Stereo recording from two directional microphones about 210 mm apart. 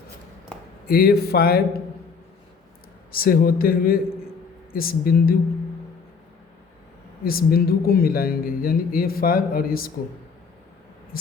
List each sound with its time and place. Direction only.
0.9 s speech: 45° left (ahead or behind)
3.1 s speech: 45° left (ahead or behind)
7.3 s speech: 45° left (ahead or behind)